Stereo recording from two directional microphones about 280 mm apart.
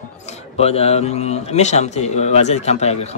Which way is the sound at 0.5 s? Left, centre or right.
Left.